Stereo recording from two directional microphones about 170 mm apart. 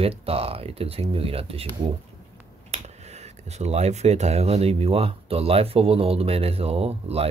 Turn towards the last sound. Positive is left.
turn(degrees=-35)  # may be behind; listen again after turning